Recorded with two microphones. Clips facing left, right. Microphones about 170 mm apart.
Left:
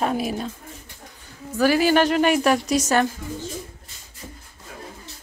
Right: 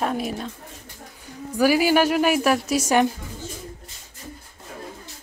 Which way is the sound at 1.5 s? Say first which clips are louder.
Even; 10° right (ahead or behind).